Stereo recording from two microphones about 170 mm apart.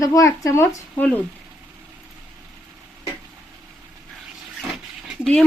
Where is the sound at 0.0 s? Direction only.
20° left (ahead or behind).